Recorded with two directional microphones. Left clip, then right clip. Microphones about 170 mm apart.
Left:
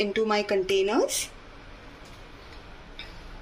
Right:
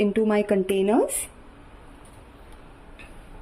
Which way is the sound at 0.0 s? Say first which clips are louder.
Right 3 dB; 45° right (ahead or behind).